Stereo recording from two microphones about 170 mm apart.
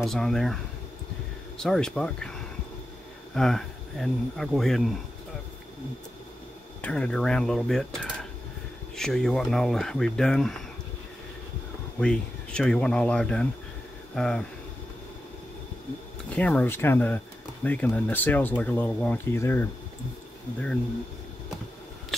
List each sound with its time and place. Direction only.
0.0 s speech: centre (ahead or behind)
1.6 s speech: 5° left (ahead or behind)
6.8 s speech: 5° left (ahead or behind)
12.0 s speech: 5° left (ahead or behind)
16.3 s speech: 10° left (ahead or behind)